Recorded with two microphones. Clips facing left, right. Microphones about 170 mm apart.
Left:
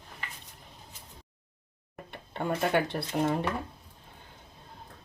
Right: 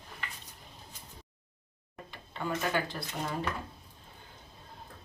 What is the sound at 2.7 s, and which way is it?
Speech, 60° left (ahead or behind).